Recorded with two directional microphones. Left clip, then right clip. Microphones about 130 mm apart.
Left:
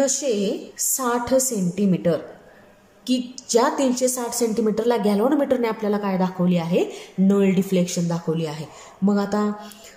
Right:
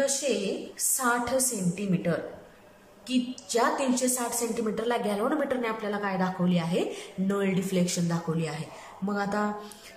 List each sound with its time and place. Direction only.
0.0 s a woman's voice: 35° left (ahead or behind)